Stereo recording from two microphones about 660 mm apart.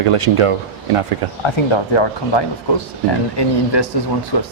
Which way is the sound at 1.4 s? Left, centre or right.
Left.